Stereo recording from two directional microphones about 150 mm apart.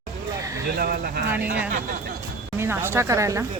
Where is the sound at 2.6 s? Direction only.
15° right (ahead or behind).